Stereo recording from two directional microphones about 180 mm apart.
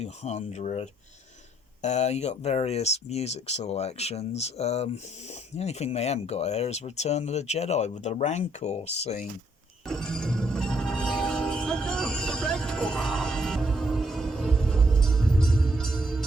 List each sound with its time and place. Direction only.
0.0 s speech: 35° left (ahead or behind)
9.8 s music: 5° left (ahead or behind)